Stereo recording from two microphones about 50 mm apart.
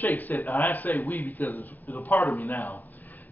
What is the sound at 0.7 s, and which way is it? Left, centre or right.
A man's voice, left.